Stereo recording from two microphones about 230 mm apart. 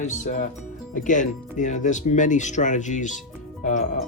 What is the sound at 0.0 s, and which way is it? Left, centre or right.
Speech, left.